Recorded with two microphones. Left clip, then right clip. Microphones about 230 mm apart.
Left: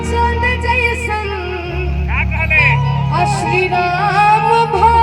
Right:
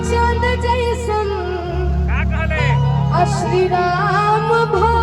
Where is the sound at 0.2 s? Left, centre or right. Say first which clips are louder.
Left 3 dB; right.